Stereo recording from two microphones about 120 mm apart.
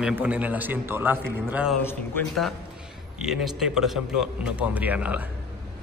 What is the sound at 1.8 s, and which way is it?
Speech, 20° left (ahead or behind).